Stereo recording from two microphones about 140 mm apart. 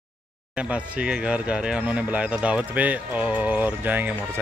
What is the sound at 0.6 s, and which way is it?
Speech, 10° right (ahead or behind).